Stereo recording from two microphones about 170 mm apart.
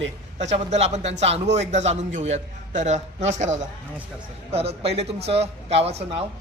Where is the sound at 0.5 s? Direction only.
40° right (ahead or behind).